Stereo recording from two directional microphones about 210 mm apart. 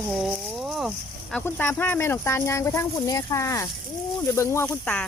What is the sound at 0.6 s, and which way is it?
Speech, centre (ahead or behind).